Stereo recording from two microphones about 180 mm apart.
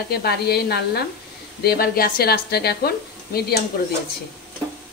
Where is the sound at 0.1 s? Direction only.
60° left (ahead or behind).